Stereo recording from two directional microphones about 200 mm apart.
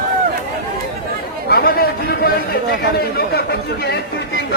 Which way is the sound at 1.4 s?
50° left (ahead or behind).